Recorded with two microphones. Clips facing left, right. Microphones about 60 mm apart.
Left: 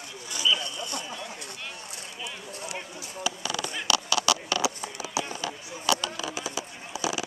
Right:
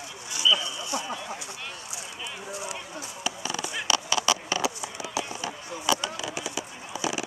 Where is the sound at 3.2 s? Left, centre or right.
Right.